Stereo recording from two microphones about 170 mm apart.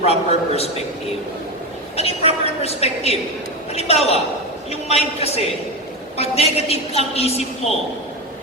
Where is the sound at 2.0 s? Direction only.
35° left (ahead or behind).